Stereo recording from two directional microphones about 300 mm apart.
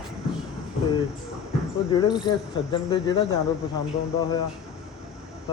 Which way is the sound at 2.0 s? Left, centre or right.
Centre.